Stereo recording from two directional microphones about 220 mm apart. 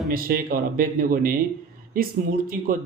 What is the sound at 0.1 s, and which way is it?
Speech, 40° right (ahead or behind).